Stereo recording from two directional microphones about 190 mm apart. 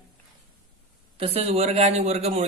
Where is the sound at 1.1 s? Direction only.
30° right (ahead or behind).